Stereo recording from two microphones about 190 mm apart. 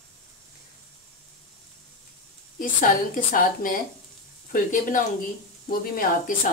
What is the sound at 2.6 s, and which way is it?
A woman's voice, 45° left (ahead or behind).